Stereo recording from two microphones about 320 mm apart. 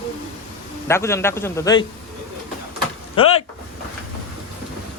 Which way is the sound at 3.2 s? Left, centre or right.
Centre.